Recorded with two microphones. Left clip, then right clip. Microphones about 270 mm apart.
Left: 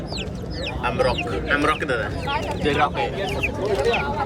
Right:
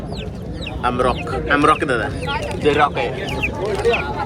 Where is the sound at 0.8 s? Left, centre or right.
Centre.